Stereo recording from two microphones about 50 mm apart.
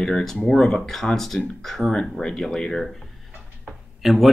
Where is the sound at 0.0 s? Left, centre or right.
Centre.